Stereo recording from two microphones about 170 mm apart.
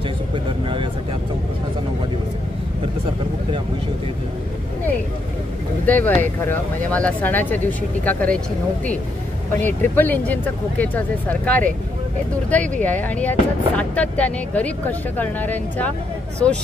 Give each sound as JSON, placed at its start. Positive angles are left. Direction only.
{"t": 0.5, "sound": "vehicle", "side_deg": -30}
{"t": 5.9, "sound": "speech", "side_deg": 10}
{"t": 9.6, "sound": "speech", "side_deg": 10}